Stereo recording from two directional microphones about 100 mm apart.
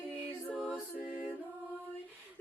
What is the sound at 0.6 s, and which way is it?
A capella, 5° left (ahead or behind).